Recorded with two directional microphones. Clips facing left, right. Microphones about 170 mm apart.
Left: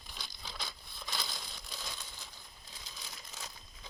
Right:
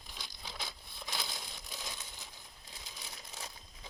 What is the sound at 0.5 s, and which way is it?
Crumpling, 15° right (ahead or behind).